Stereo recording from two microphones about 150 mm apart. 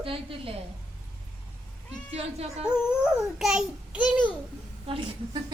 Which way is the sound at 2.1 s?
45° right (ahead or behind).